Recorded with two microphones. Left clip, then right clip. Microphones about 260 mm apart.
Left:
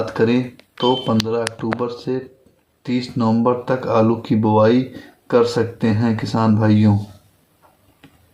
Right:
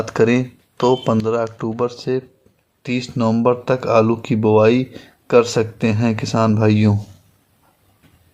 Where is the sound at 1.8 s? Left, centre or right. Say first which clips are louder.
Right 3 dB; right.